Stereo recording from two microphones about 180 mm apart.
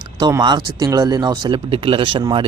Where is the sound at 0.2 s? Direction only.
20° right (ahead or behind).